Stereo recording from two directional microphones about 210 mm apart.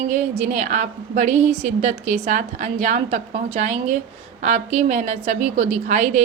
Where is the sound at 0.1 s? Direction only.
35° right (ahead or behind).